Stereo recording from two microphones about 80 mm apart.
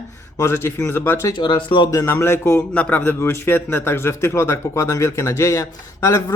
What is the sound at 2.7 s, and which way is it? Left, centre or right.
Speech, centre.